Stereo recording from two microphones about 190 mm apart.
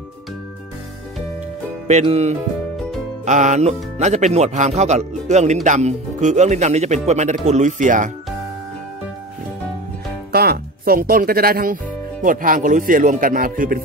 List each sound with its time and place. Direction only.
1.9 s speech: 35° right (ahead or behind)
10.3 s speech: 55° right (ahead or behind)